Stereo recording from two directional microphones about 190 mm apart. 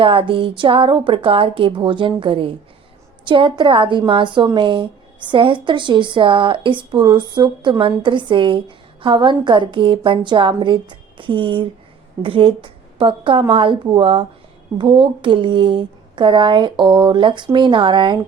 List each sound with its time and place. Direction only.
0.0 s a woman's voice: 30° right (ahead or behind)